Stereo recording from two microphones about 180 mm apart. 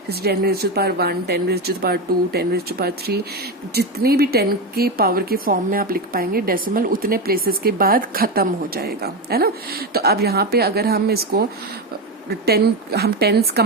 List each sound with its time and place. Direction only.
0.1 s speech: 60° right (ahead or behind)